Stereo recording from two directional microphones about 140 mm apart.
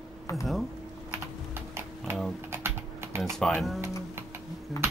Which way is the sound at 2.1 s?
20° right (ahead or behind).